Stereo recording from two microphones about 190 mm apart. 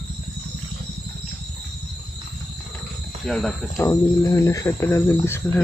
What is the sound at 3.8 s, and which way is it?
Speech, 20° left (ahead or behind).